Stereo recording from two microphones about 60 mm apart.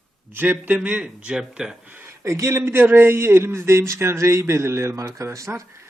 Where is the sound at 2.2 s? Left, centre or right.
Right.